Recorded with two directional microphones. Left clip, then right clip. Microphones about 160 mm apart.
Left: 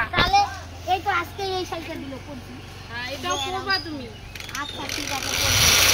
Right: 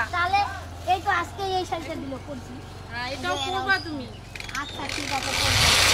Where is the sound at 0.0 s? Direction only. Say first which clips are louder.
Left 4 dB; 15° right (ahead or behind).